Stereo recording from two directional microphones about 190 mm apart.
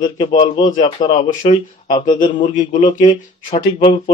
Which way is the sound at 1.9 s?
25° left (ahead or behind).